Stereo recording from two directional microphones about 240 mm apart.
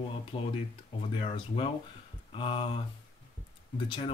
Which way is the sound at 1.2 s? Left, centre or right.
Left.